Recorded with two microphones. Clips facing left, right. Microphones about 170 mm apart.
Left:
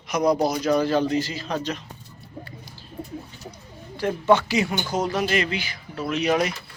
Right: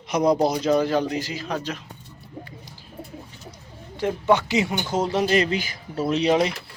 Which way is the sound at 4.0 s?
15° right (ahead or behind).